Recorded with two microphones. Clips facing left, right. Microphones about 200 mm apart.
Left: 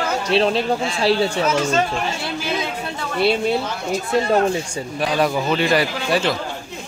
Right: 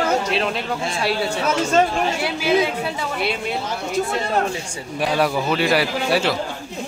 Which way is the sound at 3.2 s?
30° left (ahead or behind).